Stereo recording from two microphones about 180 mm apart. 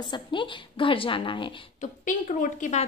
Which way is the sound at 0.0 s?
25° left (ahead or behind).